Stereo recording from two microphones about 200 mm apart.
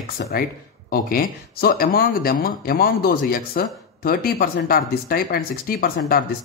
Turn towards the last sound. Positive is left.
turn(degrees=45)  # may be behind; listen again after turning